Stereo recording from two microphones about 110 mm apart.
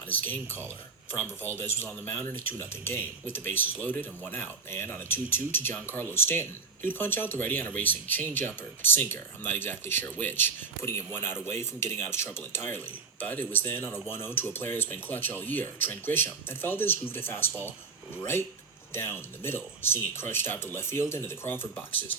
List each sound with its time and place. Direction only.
1.6 s speech: 20° left (ahead or behind)